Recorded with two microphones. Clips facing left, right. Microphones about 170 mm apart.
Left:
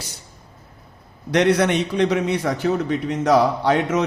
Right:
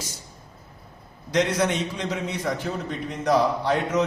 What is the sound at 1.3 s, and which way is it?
A man's voice, 65° left (ahead or behind).